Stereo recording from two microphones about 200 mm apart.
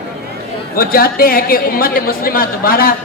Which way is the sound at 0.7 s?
45° left (ahead or behind).